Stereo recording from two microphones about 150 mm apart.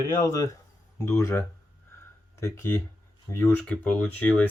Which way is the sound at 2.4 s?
15° left (ahead or behind).